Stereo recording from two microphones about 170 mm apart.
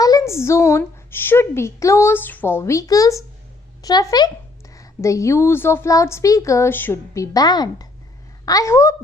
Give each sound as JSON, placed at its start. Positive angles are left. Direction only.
{"t": 0.0, "sound": "a woman's voice", "side_deg": 20}